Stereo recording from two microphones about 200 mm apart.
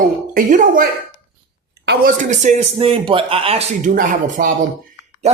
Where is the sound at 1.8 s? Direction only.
60° right (ahead or behind).